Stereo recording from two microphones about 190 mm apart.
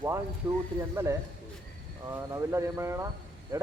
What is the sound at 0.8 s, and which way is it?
Speech, 15° right (ahead or behind).